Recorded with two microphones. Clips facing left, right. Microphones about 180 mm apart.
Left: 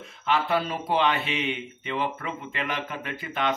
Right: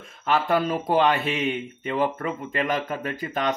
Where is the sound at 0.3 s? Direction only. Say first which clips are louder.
Right 3 dB; 45° right (ahead or behind).